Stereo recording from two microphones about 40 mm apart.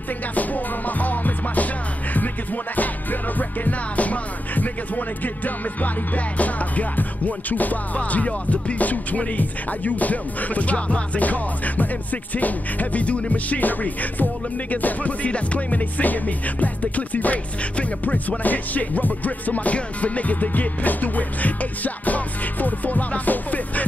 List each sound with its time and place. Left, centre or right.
0.3 s music: left
18.4 s music: left